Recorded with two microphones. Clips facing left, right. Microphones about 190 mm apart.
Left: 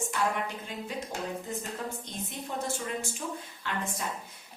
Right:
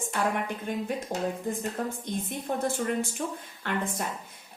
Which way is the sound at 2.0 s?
55° right (ahead or behind).